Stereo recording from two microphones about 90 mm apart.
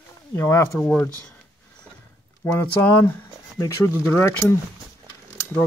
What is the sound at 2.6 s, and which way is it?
Speech, 25° left (ahead or behind).